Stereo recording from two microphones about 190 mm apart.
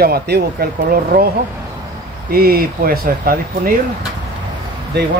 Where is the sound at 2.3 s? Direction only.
50° right (ahead or behind).